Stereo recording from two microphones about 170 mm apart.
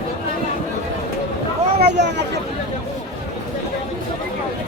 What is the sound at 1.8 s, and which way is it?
Speech, 85° right.